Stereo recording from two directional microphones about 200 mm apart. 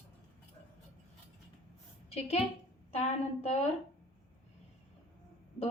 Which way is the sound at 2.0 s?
30° left (ahead or behind).